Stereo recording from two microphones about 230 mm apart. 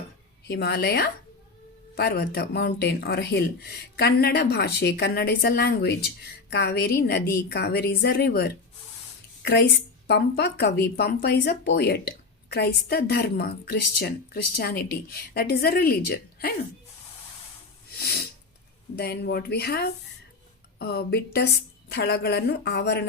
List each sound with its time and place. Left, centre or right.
0.4 s speech: left
17.9 s a sound: left
18.9 s speech: left